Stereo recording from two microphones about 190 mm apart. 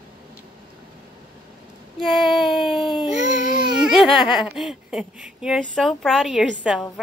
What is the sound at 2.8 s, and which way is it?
Baby cry, 25° left (ahead or behind).